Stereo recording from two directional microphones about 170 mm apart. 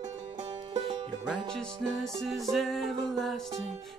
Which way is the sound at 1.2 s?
Centre (ahead or behind).